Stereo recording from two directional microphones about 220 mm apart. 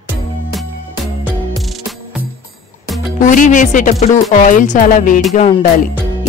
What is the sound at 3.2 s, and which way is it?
Music, 35° left (ahead or behind).